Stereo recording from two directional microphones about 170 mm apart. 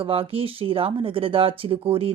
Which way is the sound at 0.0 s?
35° right (ahead or behind).